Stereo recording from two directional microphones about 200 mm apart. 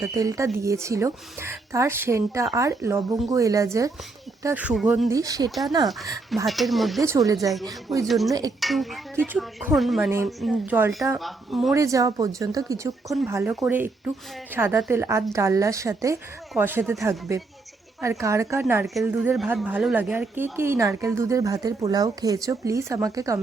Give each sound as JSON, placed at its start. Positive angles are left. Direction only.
{"t": 0.0, "sound": "speech", "side_deg": -15}
{"t": 5.1, "sound": "speech", "side_deg": -20}
{"t": 6.3, "sound": "speech", "side_deg": 0}
{"t": 7.0, "sound": "speech", "side_deg": -15}
{"t": 8.0, "sound": "speech", "side_deg": 0}
{"t": 8.3, "sound": "speech", "side_deg": -20}
{"t": 8.6, "sound": "speech", "side_deg": 0}
{"t": 10.8, "sound": "speech", "side_deg": -15}
{"t": 11.2, "sound": "speech", "side_deg": 0}
{"t": 11.7, "sound": "speech", "side_deg": -15}